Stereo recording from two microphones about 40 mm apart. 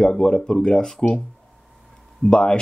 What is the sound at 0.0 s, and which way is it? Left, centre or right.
Speech, centre.